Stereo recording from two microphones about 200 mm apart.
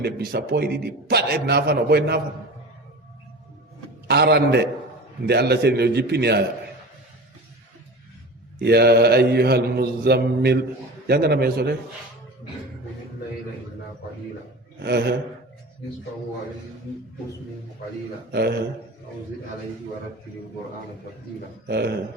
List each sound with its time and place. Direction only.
0.0 s a man's voice: 55° right (ahead or behind)
4.1 s mantra: 55° right (ahead or behind)
8.5 s mantra: 55° right (ahead or behind)
11.0 s a man's voice: 55° right (ahead or behind)
14.8 s mantra: 55° right (ahead or behind)
18.3 s mantra: 55° right (ahead or behind)
21.7 s mantra: 55° right (ahead or behind)